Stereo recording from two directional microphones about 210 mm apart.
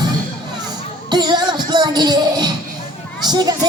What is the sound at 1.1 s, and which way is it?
Music, 20° right (ahead or behind).